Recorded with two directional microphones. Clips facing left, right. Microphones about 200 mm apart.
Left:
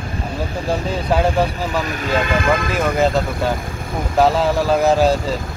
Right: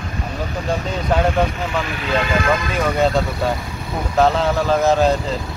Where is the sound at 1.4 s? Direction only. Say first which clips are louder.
Left 1 dB; 40° left (ahead or behind).